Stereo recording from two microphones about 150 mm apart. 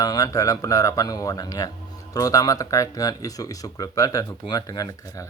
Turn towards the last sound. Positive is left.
turn(degrees=25)  # may be behind; listen again after turning